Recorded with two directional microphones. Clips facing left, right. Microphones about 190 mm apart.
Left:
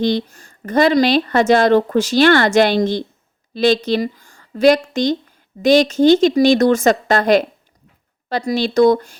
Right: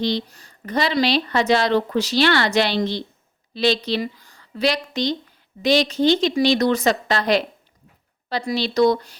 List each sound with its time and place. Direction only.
0.0 s speech: 50° left (ahead or behind)